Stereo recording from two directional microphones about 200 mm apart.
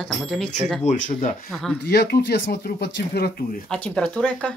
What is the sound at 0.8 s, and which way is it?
Speech, 40° left (ahead or behind).